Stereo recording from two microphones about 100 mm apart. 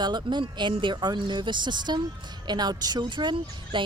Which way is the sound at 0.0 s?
45° right (ahead or behind).